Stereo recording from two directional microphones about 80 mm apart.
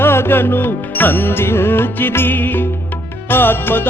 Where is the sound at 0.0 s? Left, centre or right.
Left.